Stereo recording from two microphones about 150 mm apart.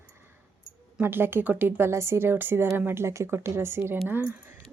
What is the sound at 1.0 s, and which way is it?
A woman's voice, 15° right (ahead or behind).